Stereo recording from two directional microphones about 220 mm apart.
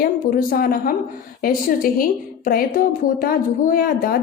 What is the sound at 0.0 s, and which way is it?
A woman's voice, 40° left (ahead or behind).